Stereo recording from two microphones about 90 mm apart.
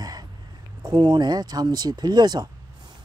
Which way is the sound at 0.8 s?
55° right (ahead or behind).